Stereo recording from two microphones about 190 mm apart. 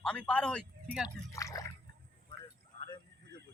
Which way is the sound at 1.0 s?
15° left (ahead or behind).